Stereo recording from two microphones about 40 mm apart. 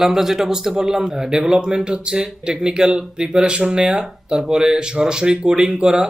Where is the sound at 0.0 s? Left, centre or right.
Centre.